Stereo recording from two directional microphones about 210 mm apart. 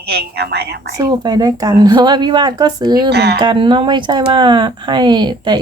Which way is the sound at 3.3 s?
20° right (ahead or behind).